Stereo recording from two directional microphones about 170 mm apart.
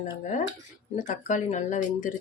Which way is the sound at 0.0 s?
45° left (ahead or behind).